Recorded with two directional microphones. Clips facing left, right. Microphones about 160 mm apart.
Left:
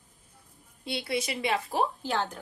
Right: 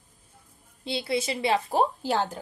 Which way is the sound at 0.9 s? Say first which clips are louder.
Right 3 dB; 25° right (ahead or behind).